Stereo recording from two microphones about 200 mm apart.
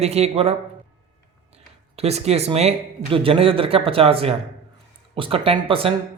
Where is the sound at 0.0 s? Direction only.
30° right (ahead or behind).